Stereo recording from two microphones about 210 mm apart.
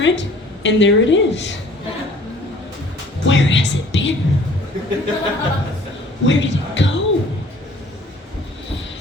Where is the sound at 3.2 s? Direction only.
60° left (ahead or behind).